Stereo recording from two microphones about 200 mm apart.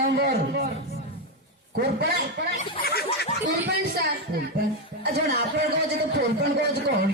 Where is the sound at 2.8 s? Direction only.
50° left (ahead or behind).